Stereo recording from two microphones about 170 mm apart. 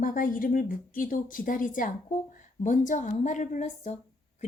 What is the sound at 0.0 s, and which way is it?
Speech, 55° left (ahead or behind).